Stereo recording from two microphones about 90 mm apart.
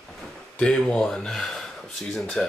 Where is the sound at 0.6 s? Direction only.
10° left (ahead or behind).